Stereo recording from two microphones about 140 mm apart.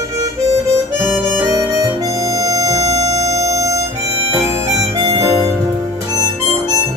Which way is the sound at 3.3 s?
25° right (ahead or behind).